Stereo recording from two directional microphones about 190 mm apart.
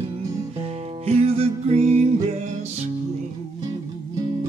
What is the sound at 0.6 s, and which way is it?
Music, 30° right (ahead or behind).